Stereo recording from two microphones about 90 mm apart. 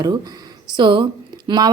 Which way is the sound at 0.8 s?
55° right (ahead or behind).